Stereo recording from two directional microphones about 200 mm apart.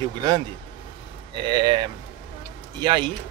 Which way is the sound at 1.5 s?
20° right (ahead or behind).